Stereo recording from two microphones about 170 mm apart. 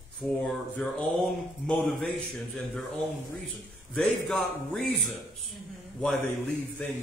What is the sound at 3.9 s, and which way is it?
A man's voice, 5° left (ahead or behind).